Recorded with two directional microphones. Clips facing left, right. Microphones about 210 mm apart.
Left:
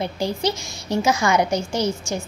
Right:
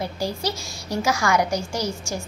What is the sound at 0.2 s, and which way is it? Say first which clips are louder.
A woman's voice: left 5 dB; 20° left (ahead or behind).